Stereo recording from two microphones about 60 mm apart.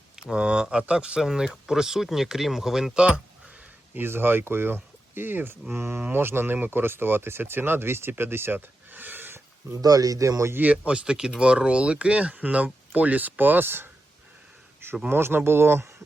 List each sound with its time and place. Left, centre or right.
0.2 s speech: centre
2.9 s a sound: centre
3.9 s speech: right
8.5 s a sound: right
9.7 s speech: right
10.7 s speech: centre; by 13.9 s right
15.1 s speech: right